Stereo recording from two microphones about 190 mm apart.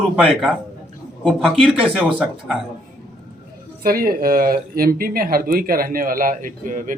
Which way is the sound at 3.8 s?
50° right (ahead or behind).